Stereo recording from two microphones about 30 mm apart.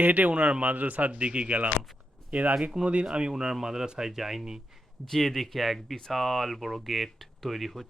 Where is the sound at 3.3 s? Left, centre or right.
Centre.